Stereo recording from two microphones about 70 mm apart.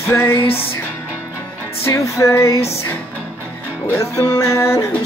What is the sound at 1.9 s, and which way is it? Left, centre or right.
Music, left.